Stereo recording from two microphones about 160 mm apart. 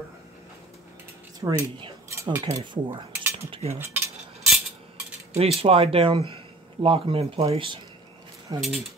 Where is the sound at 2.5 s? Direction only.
30° right (ahead or behind).